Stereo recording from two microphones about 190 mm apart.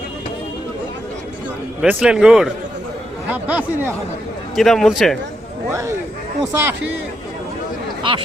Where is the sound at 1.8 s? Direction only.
5° right (ahead or behind).